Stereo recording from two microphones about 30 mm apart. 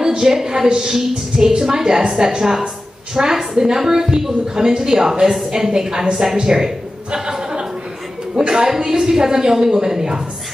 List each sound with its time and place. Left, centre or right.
0.0 s a woman's voice: centre
7.1 s chuckle: right
8.4 s a woman's voice: right